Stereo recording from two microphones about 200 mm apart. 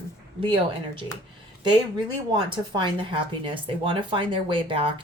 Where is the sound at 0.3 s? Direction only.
25° right (ahead or behind).